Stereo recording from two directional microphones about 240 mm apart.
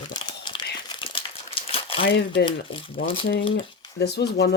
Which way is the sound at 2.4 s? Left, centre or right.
Left.